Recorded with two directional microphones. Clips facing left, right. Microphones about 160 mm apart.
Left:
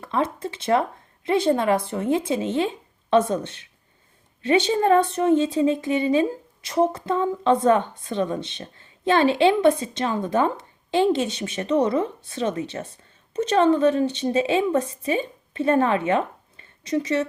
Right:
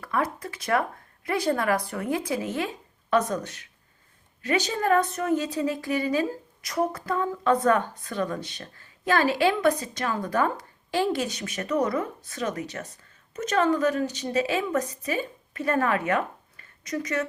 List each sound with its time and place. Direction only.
0.0 s a woman's voice: 25° left (ahead or behind)